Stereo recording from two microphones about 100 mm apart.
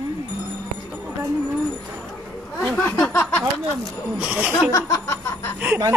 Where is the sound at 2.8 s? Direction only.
25° left (ahead or behind).